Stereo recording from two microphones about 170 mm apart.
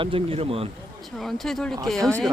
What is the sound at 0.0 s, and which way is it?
Speech, 30° right (ahead or behind).